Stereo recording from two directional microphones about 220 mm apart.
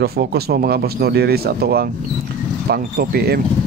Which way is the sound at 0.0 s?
45° right (ahead or behind).